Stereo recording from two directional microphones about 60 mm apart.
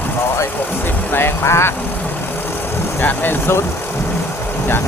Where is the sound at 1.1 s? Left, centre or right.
Left.